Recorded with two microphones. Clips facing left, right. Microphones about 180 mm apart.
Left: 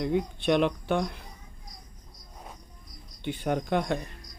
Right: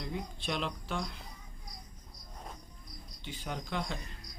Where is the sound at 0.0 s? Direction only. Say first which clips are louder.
Left 12 dB; 60° left (ahead or behind).